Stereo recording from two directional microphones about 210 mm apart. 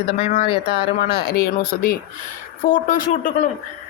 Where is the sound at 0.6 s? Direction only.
50° left (ahead or behind).